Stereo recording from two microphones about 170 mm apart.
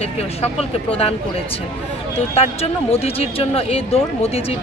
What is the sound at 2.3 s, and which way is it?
Speech, 35° left (ahead or behind).